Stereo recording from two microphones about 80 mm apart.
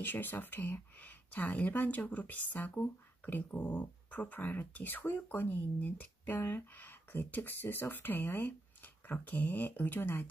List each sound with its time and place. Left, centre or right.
0.0 s speech: left